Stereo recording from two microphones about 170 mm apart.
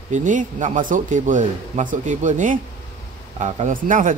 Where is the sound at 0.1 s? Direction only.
50° right (ahead or behind).